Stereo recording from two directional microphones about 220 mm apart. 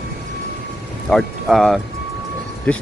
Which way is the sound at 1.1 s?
Centre (ahead or behind).